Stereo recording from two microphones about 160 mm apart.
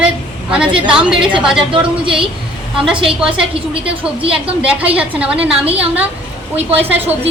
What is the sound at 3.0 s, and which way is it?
A woman's voice, 5° right (ahead or behind).